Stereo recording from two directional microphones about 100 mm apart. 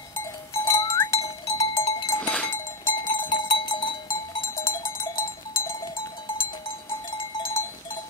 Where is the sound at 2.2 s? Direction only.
10° left (ahead or behind).